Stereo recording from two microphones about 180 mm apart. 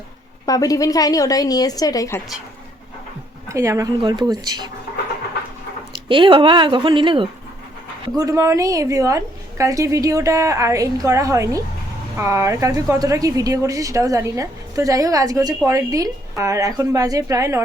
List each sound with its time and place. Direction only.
0.4 s a woman's voice: 20° left (ahead or behind)
3.5 s speech: 15° right (ahead or behind)
5.9 s a woman's voice: 25° right (ahead or behind)